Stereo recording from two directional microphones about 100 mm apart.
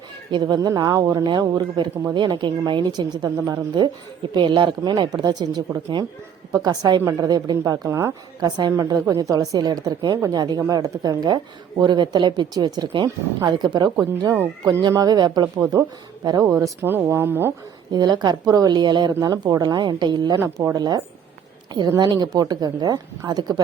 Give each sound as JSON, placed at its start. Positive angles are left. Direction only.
{"t": 0.4, "sound": "a woman's voice", "side_deg": -40}
{"t": 1.2, "sound": "a woman's voice", "side_deg": -50}
{"t": 4.4, "sound": "speech", "side_deg": -55}
{"t": 4.8, "sound": "a woman's voice", "side_deg": -45}
{"t": 7.9, "sound": "speech", "side_deg": -25}
{"t": 8.4, "sound": "a woman's voice", "side_deg": -45}
{"t": 8.7, "sound": "a woman's voice", "side_deg": -35}
{"t": 13.9, "sound": "speech", "side_deg": -25}
{"t": 14.8, "sound": "a woman's voice", "side_deg": -40}
{"t": 16.4, "sound": "a woman's voice", "side_deg": -30}
{"t": 16.9, "sound": "speech", "side_deg": -20}
{"t": 17.9, "sound": "a woman's voice", "side_deg": -45}
{"t": 20.4, "sound": "a woman's voice", "side_deg": -30}